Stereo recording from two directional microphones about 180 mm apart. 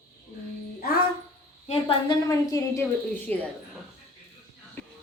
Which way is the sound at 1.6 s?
30° left (ahead or behind).